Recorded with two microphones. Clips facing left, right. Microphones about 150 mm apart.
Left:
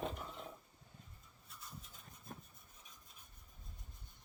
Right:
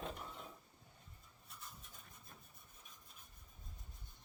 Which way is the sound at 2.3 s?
50° left (ahead or behind).